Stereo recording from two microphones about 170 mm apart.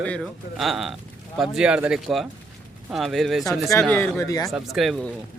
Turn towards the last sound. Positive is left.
turn(degrees=0)  # may be behind; listen again after turning